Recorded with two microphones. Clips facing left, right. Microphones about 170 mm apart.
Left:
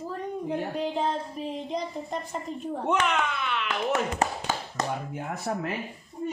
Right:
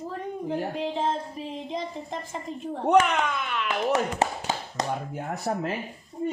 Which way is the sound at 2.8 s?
40° right (ahead or behind).